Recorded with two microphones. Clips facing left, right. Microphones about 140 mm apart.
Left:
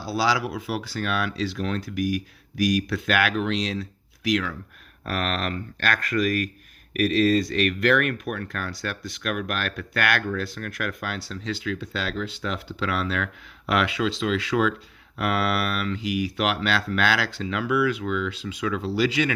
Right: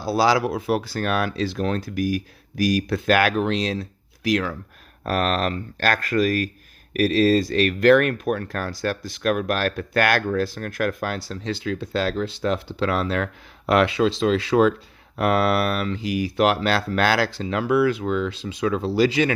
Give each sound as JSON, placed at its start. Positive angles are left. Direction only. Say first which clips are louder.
{"t": 0.0, "sound": "speech", "louder": "right 5 dB", "side_deg": -45}